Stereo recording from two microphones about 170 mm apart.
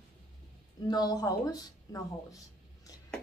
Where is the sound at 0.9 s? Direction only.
25° left (ahead or behind).